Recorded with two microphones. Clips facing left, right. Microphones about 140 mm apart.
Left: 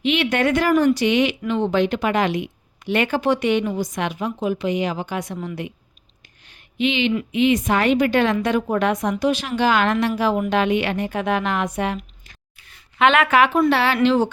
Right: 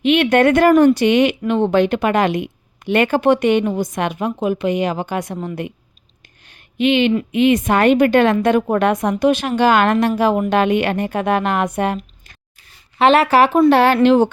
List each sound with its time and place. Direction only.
0.0 s a woman's voice: 55° right (ahead or behind)
6.4 s a sound: 50° right (ahead or behind)
7.3 s a woman's voice: 50° right (ahead or behind)
13.0 s speech: 35° right (ahead or behind)
13.7 s a woman's voice: 45° right (ahead or behind)